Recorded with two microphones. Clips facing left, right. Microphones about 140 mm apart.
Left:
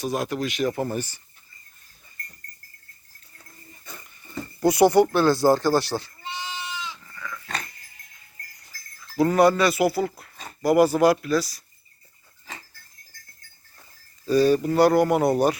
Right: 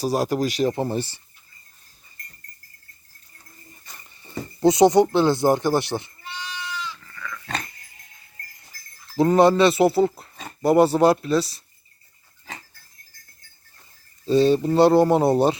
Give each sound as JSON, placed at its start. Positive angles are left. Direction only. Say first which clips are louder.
{"t": 0.0, "sound": "speech", "louder": "right 4 dB", "side_deg": -35}
{"t": 4.2, "sound": "speech", "louder": "right 3 dB", "side_deg": -20}
{"t": 6.2, "sound": "goat", "louder": "left 1 dB", "side_deg": 20}
{"t": 9.1, "sound": "speech", "louder": "right 2 dB", "side_deg": -25}
{"t": 14.3, "sound": "speech", "louder": "right 1 dB", "side_deg": -25}